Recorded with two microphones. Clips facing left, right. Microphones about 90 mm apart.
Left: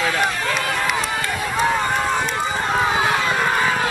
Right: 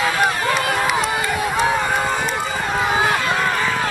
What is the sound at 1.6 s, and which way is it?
Run, centre (ahead or behind).